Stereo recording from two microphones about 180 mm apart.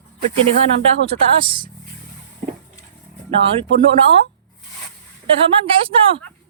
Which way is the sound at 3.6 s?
30° right (ahead or behind).